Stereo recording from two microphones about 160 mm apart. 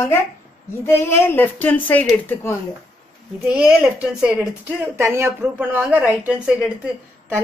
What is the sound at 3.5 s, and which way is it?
Speech, 5° right (ahead or behind).